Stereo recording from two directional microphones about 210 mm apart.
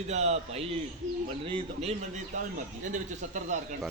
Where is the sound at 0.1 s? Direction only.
30° right (ahead or behind).